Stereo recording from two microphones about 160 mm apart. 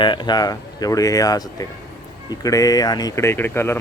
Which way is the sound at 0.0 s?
30° left (ahead or behind).